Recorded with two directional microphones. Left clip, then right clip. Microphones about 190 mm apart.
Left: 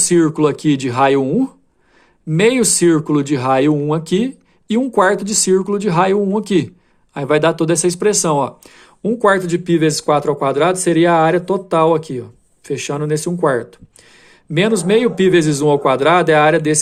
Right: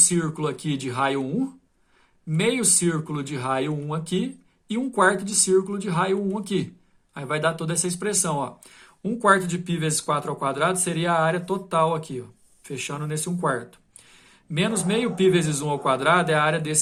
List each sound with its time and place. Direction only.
0.0 s speech: 40° left (ahead or behind)